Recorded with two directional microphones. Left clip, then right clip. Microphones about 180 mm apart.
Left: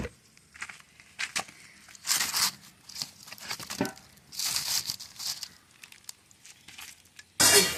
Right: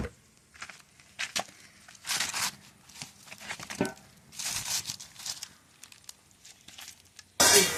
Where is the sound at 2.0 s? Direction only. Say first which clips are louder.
Left 3 dB; 10° right (ahead or behind).